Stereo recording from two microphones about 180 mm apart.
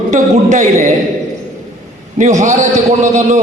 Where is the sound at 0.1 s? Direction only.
40° right (ahead or behind).